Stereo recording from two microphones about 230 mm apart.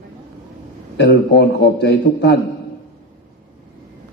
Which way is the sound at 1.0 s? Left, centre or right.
Left.